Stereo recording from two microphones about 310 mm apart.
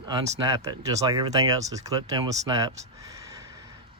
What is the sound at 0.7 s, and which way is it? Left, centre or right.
Speech, centre.